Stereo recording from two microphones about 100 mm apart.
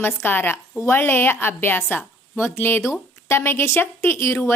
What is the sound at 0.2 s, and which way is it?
A woman's voice, 20° left (ahead or behind).